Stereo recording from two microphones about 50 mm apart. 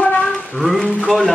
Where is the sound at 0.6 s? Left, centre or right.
Centre.